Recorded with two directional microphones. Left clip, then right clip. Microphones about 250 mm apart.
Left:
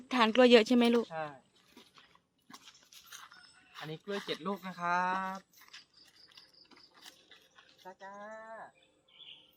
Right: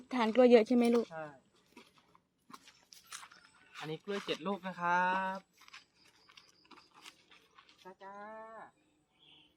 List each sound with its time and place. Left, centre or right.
0.1 s speech: centre
1.1 s speech: left
3.7 s speech: centre
6.3 s a sound: centre
7.5 s speech: centre